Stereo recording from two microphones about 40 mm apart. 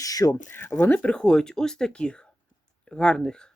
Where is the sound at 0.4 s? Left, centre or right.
Left.